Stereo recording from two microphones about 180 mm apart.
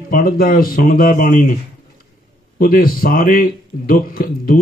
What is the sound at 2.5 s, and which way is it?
A man's voice, 55° left (ahead or behind).